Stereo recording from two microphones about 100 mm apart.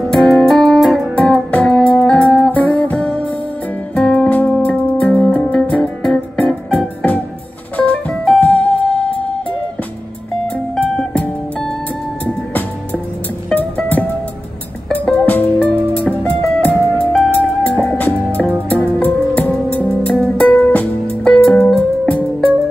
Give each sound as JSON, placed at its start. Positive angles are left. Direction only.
{"t": 0.0, "sound": "music", "side_deg": 0}
{"t": 10.5, "sound": "music", "side_deg": 10}
{"t": 13.6, "sound": "music", "side_deg": 15}